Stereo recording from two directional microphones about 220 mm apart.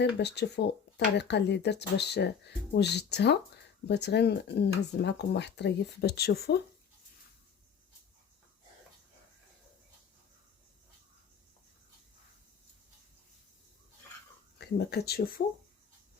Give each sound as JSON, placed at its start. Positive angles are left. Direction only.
{"t": 0.2, "sound": "speech", "side_deg": 50}
{"t": 14.6, "sound": "speech", "side_deg": 50}